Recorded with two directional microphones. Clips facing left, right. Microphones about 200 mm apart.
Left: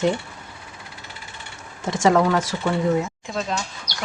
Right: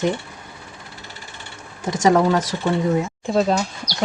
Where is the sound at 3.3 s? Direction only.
35° right (ahead or behind).